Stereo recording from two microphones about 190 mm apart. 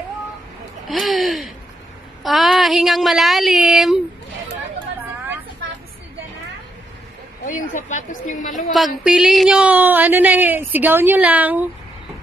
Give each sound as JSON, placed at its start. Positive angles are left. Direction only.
{"t": 0.8, "sound": "a sound", "side_deg": 0}
{"t": 2.2, "sound": "speech", "side_deg": 0}
{"t": 7.4, "sound": "a woman's voice", "side_deg": 40}
{"t": 8.7, "sound": "speech", "side_deg": 0}